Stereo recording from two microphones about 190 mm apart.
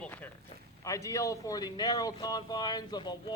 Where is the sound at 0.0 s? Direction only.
10° left (ahead or behind).